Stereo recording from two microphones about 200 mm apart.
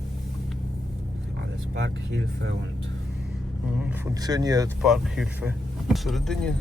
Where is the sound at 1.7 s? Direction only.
60° right (ahead or behind).